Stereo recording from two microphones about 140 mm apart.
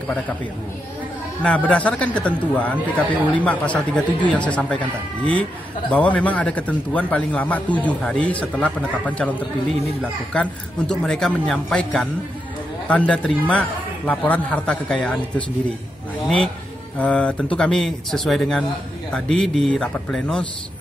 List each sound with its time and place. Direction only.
1.4 s a man's voice: 10° left (ahead or behind)
17.0 s a man's voice: 10° left (ahead or behind)